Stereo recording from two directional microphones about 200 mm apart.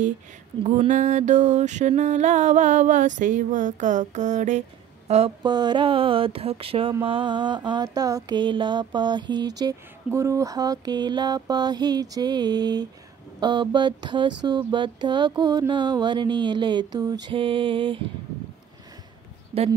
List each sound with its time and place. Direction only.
0.7 s music: 35° right (ahead or behind)
19.5 s speech: 30° right (ahead or behind)